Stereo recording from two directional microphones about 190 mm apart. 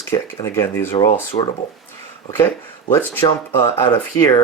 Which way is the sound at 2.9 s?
10° left (ahead or behind).